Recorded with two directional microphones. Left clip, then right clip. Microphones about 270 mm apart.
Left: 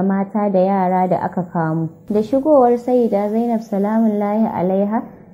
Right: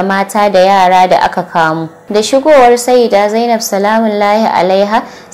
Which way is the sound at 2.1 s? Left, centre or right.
Centre.